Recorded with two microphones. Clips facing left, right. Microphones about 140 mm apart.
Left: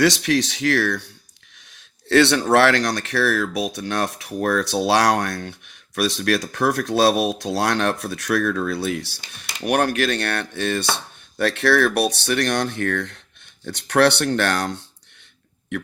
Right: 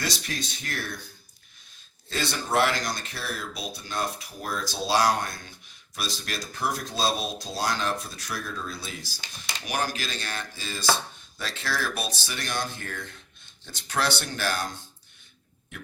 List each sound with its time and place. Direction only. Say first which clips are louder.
0.0 s speech: left 14 dB; 75° left (ahead or behind)